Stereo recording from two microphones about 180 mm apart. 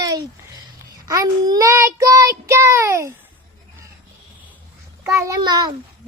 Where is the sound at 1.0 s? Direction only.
20° right (ahead or behind).